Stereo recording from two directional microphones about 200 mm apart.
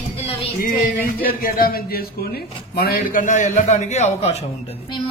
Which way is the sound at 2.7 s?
45° left (ahead or behind).